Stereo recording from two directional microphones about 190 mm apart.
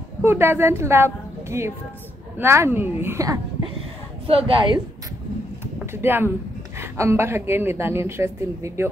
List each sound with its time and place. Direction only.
0.2 s a woman's voice: 10° right (ahead or behind)
4.3 s a woman's voice: 30° right (ahead or behind)
5.9 s a woman's voice: 10° right (ahead or behind)